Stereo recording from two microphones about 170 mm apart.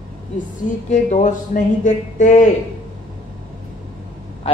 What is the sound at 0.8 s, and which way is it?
Speech, 45° left (ahead or behind).